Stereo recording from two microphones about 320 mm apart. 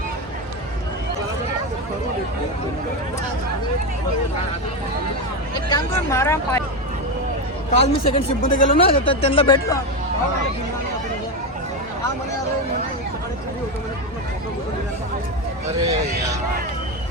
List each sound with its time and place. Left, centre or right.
5.6 s speech: centre
7.7 s speech: centre
15.9 s speech: right